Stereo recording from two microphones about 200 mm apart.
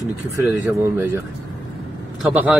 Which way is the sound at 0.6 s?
10° right (ahead or behind).